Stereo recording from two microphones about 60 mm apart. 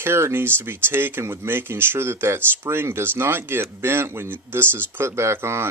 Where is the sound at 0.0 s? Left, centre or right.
Right.